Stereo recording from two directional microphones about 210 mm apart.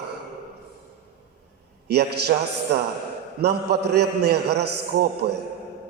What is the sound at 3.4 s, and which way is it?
A man's voice, 50° right (ahead or behind).